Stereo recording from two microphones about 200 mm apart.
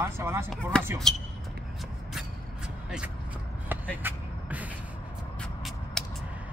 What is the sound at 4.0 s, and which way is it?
Vehicle, 10° right (ahead or behind).